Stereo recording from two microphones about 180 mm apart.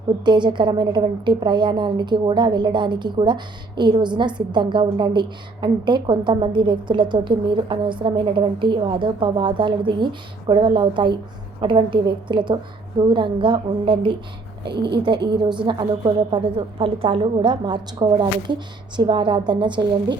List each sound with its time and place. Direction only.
0.3 s a woman's voice: 25° right (ahead or behind)
14.6 s a woman's voice: 65° right (ahead or behind)
15.3 s a woman's voice: 25° right (ahead or behind)